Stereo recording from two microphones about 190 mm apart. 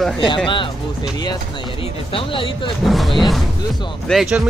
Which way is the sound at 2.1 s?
30° left (ahead or behind).